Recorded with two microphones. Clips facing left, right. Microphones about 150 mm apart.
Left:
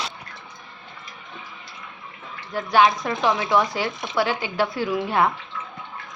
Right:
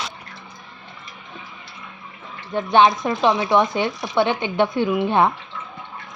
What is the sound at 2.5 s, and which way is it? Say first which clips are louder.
Speech: right 3 dB; 25° right (ahead or behind).